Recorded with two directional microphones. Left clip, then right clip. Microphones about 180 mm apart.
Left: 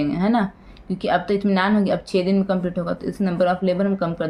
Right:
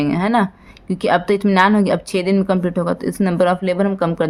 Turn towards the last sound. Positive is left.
turn(degrees=-50)  # may be behind; listen again after turning